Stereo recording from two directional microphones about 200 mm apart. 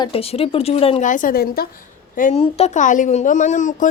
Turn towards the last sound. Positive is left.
turn(degrees=40)  # may be behind; listen again after turning